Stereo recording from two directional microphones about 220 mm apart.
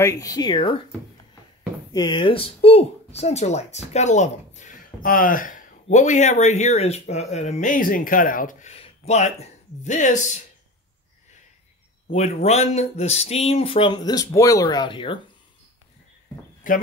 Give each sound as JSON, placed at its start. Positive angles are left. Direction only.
{"t": 0.0, "sound": "speech", "side_deg": 15}
{"t": 1.9, "sound": "speech", "side_deg": 20}
{"t": 12.1, "sound": "speech", "side_deg": 30}
{"t": 16.6, "sound": "speech", "side_deg": 35}